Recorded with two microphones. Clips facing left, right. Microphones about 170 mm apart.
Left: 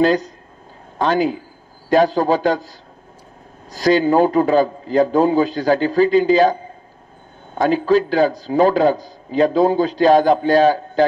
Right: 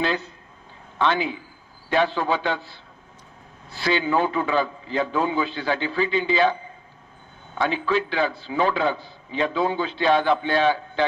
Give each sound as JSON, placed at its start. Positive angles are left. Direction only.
{"t": 0.0, "sound": "a man's voice", "side_deg": 40}
{"t": 3.7, "sound": "a man's voice", "side_deg": 40}